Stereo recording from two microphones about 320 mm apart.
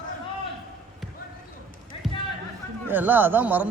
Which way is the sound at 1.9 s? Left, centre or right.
Centre.